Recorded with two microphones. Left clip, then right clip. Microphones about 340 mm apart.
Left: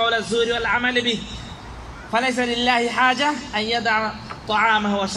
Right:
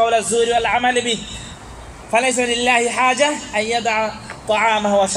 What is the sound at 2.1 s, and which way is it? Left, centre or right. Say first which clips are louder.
A man's voice: right 4 dB; centre.